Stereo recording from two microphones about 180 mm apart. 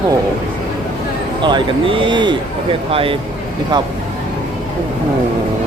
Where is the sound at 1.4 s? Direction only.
25° right (ahead or behind).